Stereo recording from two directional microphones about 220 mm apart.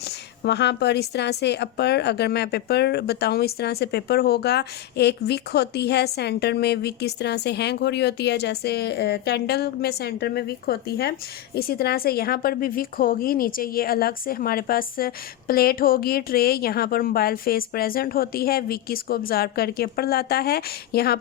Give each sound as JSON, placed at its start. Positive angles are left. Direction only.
{"t": 0.0, "sound": "a woman's voice", "side_deg": 50}